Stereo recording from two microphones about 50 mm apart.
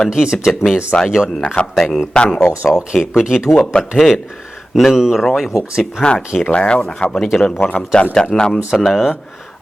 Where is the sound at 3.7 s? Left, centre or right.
Left.